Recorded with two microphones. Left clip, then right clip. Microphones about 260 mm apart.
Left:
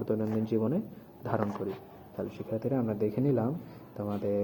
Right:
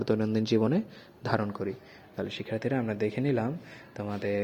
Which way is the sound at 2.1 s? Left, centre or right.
Right.